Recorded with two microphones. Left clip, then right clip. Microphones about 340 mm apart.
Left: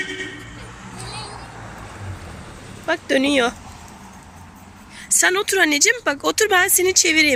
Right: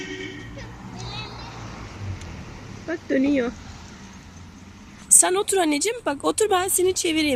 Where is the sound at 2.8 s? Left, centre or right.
Left.